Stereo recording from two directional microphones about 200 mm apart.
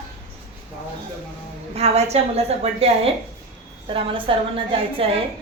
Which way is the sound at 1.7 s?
30° right (ahead or behind).